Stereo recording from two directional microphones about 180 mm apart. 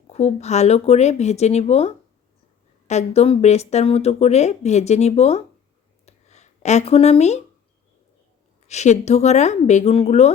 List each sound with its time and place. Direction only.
0.1 s speech: 35° left (ahead or behind)
6.1 s a sound: 40° left (ahead or behind)
8.6 s speech: 40° left (ahead or behind)